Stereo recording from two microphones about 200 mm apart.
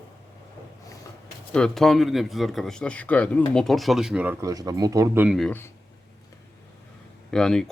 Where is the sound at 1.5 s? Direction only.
5° left (ahead or behind).